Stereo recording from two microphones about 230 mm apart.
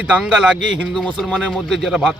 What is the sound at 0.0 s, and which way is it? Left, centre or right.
A man's voice, centre.